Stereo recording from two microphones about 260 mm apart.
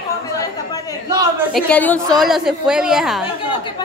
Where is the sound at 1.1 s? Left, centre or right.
Centre.